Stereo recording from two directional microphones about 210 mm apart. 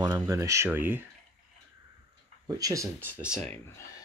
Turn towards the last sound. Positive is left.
turn(degrees=10)  # may be behind; listen again after turning